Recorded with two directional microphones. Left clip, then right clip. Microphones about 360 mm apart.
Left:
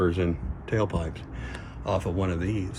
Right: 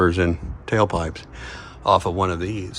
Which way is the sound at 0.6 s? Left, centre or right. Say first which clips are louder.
Right 8 dB; centre.